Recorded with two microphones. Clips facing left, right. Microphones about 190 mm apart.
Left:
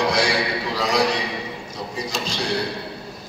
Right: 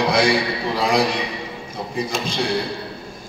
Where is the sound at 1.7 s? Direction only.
55° right (ahead or behind).